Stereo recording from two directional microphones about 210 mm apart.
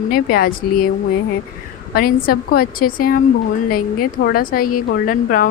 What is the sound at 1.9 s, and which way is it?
A woman's voice, 45° left (ahead or behind).